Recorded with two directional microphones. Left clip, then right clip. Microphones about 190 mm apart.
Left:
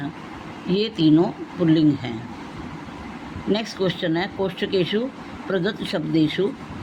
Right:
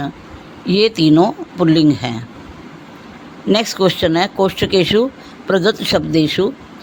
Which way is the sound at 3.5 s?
60° right (ahead or behind).